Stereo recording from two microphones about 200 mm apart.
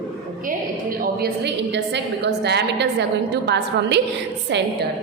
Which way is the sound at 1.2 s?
60° right (ahead or behind).